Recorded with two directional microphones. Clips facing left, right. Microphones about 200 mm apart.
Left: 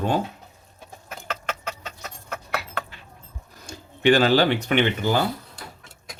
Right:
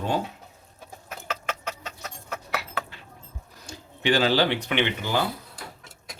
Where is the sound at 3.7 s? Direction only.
50° left (ahead or behind).